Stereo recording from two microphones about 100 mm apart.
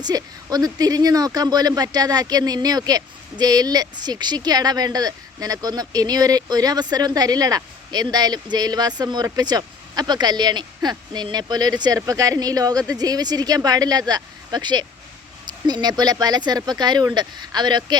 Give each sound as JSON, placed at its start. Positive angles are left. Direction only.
{"t": 0.0, "sound": "speech", "side_deg": -40}